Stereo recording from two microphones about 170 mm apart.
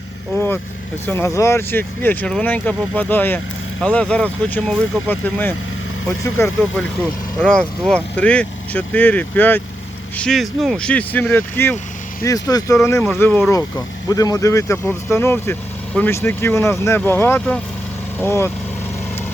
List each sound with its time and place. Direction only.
0.3 s vehicle: 15° left (ahead or behind)
1.0 s speech: 15° left (ahead or behind)